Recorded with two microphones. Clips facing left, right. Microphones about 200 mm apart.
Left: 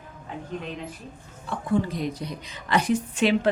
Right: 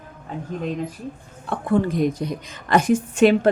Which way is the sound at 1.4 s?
55° right (ahead or behind).